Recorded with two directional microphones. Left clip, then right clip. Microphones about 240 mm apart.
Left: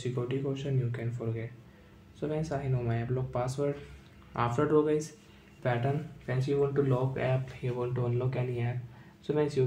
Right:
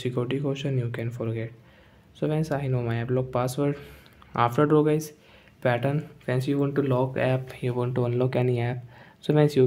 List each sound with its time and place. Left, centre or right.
0.0 s speech: right